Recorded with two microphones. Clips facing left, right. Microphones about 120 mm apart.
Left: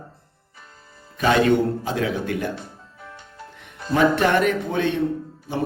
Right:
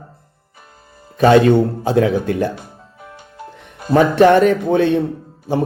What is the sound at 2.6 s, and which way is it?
Music, 10° right (ahead or behind).